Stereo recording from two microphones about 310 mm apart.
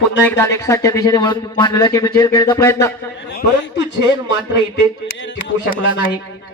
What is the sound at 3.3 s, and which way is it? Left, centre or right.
Speech, left.